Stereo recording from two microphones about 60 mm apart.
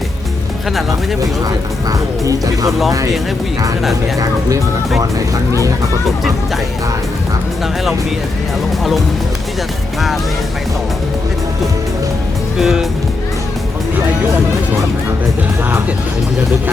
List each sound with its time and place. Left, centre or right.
1.9 s speech: right
4.2 s speech: right
5.5 s speech: right
12.5 s speech: centre